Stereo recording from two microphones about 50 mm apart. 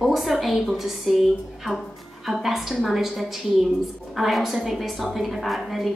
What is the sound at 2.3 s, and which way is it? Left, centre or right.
A woman's voice, centre.